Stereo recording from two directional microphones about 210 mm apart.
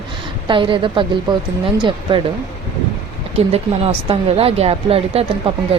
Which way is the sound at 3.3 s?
30° right (ahead or behind).